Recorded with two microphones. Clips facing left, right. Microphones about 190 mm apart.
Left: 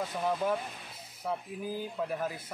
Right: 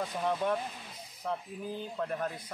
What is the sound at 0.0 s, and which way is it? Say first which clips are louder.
Speech: even; centre (ahead or behind).